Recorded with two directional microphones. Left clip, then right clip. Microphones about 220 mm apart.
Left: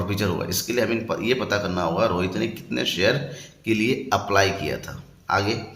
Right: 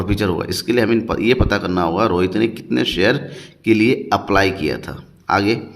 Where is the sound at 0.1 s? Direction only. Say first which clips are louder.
Right 7 dB; 35° right (ahead or behind).